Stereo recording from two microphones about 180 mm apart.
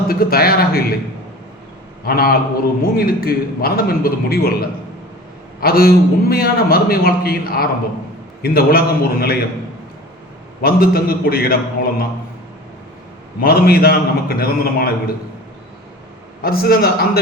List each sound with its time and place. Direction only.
0.1 s a man's voice: 55° left (ahead or behind)
2.0 s a man's voice: 55° left (ahead or behind)
10.6 s a man's voice: 55° left (ahead or behind)
13.4 s a man's voice: 60° left (ahead or behind)
16.4 s a man's voice: 55° left (ahead or behind)